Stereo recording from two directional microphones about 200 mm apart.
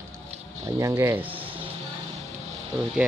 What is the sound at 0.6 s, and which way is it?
Speech, 15° right (ahead or behind).